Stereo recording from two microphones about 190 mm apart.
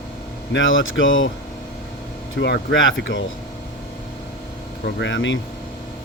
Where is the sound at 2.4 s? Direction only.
75° left (ahead or behind).